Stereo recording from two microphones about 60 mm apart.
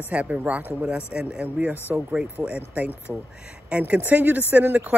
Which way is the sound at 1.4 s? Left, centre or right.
Right.